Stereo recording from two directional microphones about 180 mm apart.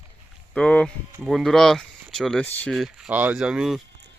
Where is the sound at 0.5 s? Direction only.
5° left (ahead or behind).